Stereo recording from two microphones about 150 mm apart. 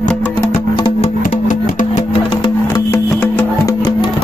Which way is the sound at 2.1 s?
30° left (ahead or behind).